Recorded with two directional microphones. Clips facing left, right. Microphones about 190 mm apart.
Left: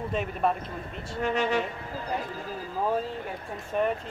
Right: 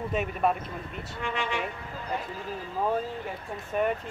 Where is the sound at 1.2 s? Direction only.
40° left (ahead or behind).